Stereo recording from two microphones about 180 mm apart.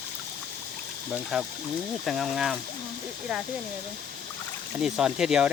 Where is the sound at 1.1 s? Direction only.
5° right (ahead or behind).